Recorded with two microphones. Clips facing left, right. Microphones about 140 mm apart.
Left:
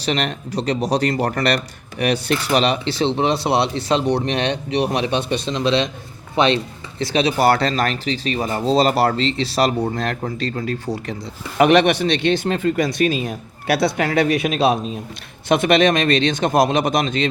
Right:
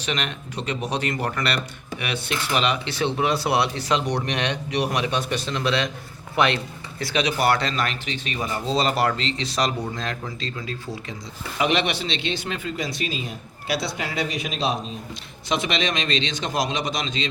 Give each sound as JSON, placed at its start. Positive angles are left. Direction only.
{"t": 0.0, "sound": "speech", "side_deg": 35}
{"t": 9.9, "sound": "speech", "side_deg": 55}